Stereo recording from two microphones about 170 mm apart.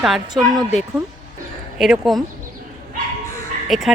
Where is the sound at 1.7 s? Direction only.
Centre (ahead or behind).